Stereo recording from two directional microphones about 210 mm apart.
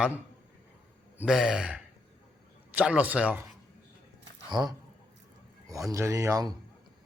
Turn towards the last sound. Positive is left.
turn(degrees=-15)  # may be behind; listen again after turning